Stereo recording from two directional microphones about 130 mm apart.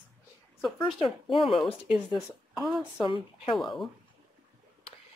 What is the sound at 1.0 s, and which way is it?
Speech, centre (ahead or behind).